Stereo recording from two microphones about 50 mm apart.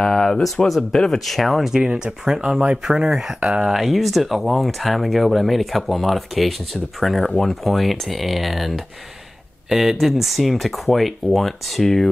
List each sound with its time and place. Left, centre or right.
0.0 s speech: centre
3.3 s speech: right
3.6 s speech: centre